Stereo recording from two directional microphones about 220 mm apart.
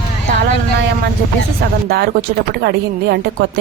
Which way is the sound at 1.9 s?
45° right (ahead or behind).